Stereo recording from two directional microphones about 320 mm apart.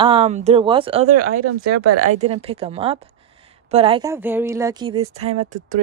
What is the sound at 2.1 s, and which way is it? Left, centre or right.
A woman's voice, centre.